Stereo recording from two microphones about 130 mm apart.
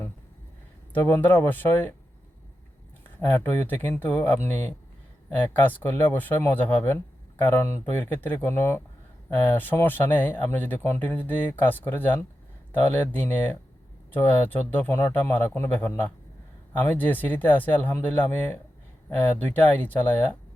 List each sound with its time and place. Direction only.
0.9 s speech: 15° left (ahead or behind)
3.2 s speech: 15° left (ahead or behind)